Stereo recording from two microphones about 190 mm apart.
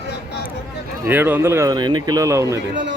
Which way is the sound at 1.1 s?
10° right (ahead or behind).